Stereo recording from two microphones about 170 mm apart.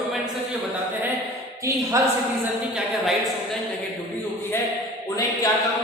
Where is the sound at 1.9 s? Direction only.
15° right (ahead or behind).